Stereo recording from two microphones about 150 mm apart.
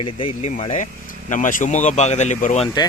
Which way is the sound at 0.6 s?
50° left (ahead or behind).